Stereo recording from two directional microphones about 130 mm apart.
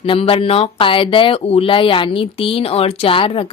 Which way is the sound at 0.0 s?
45° left (ahead or behind).